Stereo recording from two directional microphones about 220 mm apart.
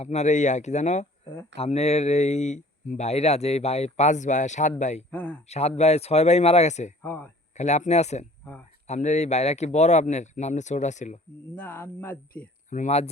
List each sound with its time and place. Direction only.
0.0 s speech: 30° left (ahead or behind)
5.1 s speech: 5° left (ahead or behind)
5.5 s speech: 30° left (ahead or behind)
7.0 s speech: 10° left (ahead or behind)
7.5 s speech: 30° left (ahead or behind)
11.5 s speech: 10° left (ahead or behind)
12.7 s speech: 30° left (ahead or behind)